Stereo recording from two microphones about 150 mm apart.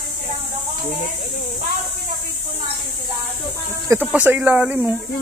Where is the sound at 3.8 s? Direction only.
10° right (ahead or behind).